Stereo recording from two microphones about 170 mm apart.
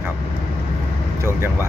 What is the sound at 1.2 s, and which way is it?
Speech, 15° right (ahead or behind).